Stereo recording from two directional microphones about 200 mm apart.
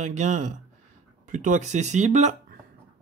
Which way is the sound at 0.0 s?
35° right (ahead or behind).